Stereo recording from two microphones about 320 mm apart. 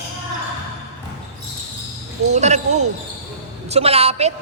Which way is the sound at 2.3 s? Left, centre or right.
Right.